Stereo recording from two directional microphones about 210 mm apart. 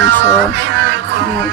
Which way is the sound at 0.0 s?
60° right (ahead or behind).